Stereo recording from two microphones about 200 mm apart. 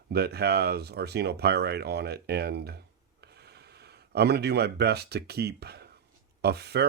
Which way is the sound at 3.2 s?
55° right (ahead or behind).